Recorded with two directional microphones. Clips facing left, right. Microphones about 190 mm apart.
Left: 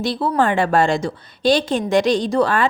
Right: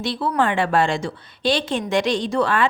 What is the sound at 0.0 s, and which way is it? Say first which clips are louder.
A woman's voice: left 3 dB; 40° left (ahead or behind).